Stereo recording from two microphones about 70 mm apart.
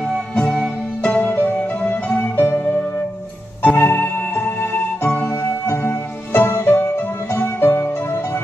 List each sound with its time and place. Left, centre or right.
1.0 s music: left
3.6 s music: left
5.3 s music: left